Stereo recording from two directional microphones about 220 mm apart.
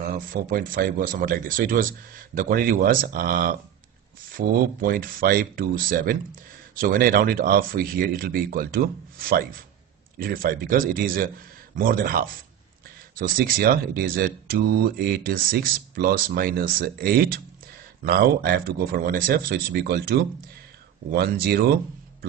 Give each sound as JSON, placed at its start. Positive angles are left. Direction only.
{"t": 0.1, "sound": "speech", "side_deg": -40}